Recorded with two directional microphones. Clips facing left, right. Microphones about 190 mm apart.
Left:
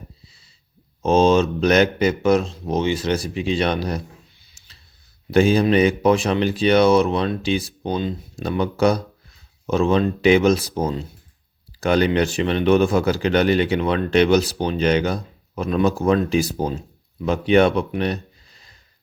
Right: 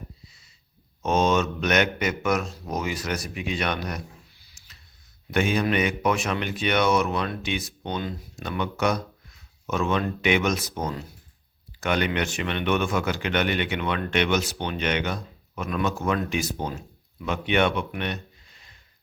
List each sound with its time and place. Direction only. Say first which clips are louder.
1.0 s speech: left 7 dB; 30° left (ahead or behind)
5.3 s a man's voice: left 8 dB; 30° left (ahead or behind)